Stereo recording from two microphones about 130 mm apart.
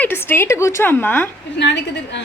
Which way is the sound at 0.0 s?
15° left (ahead or behind).